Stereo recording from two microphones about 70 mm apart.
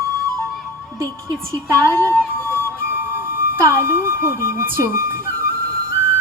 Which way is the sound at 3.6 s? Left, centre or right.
Right.